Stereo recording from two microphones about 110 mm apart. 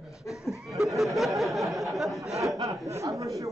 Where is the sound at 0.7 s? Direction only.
Centre (ahead or behind).